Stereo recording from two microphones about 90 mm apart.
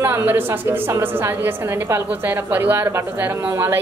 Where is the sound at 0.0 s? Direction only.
25° right (ahead or behind).